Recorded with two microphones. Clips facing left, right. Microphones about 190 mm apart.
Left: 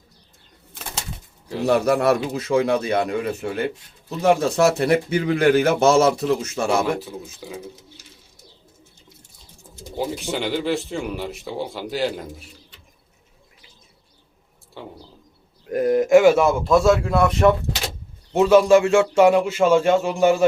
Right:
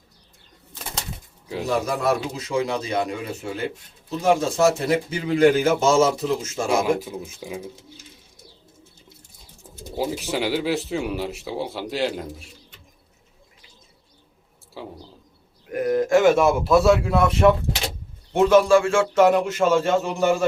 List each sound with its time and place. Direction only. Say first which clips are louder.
1.6 s speech: left 5 dB; 65° left (ahead or behind)
7.0 s speech: right 1 dB; 15° right (ahead or behind)
10.0 s speech: even; 5° right (ahead or behind)
14.8 s a sound: right 1 dB; centre (ahead or behind)
15.7 s a man's voice: left 4 dB; 25° left (ahead or behind); by 17.5 s 5° right (ahead or behind)
18.3 s speech: left 1 dB; 10° left (ahead or behind)
18.7 s speech: left 3 dB; 20° left (ahead or behind)